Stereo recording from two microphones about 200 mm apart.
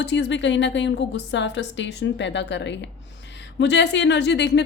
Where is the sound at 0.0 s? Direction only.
60° left (ahead or behind).